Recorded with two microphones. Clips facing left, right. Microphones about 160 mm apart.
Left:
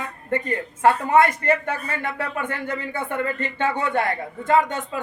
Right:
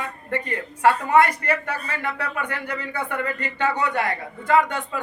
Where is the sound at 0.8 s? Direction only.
25° left (ahead or behind).